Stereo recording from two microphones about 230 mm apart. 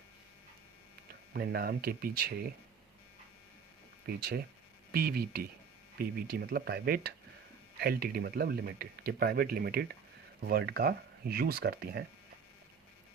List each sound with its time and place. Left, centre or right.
1.3 s speech: right
4.0 s speech: right